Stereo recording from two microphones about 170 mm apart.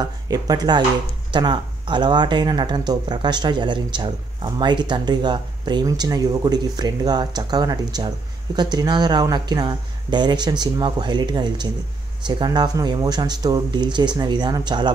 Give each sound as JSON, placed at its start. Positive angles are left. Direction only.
{"t": 0.0, "sound": "speech", "side_deg": -25}